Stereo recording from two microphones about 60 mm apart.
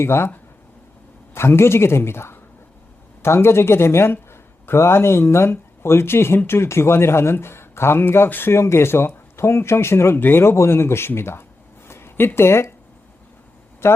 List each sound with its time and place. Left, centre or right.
0.0 s speech: left
1.3 s a man's voice: left
11.9 s a sound: left
13.8 s speech: left